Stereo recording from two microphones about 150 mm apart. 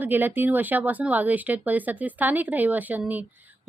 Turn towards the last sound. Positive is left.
turn(degrees=-10)  # may be behind; listen again after turning